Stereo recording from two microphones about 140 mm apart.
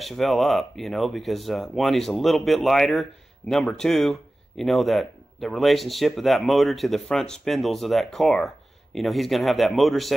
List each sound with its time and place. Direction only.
0.0 s speech: centre (ahead or behind)